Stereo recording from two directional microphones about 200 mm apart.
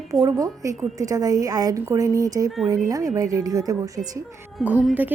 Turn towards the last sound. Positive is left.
turn(degrees=-10)  # may be behind; listen again after turning